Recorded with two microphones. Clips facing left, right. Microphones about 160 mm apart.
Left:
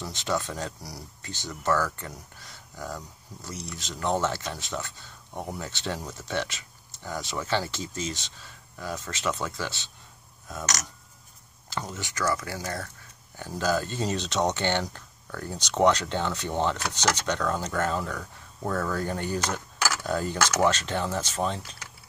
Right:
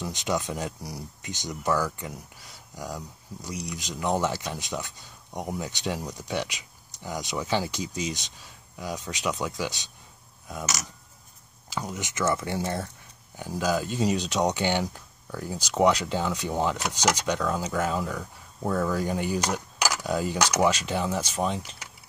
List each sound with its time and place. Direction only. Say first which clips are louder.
0.0 s speech: right 1 dB; 15° right (ahead or behind)
13.4 s speech: even; 10° right (ahead or behind)